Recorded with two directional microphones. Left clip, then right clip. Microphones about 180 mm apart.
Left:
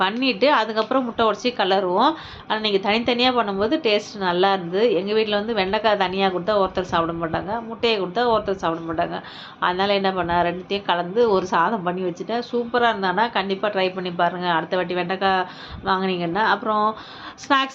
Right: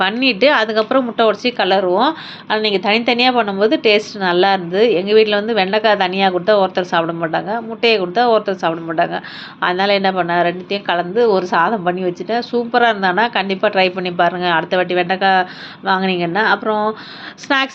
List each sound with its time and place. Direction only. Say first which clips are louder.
0.0 s a woman's voice: right 6 dB; 15° right (ahead or behind)